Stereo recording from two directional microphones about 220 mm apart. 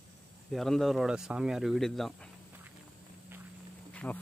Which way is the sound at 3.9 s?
5° left (ahead or behind).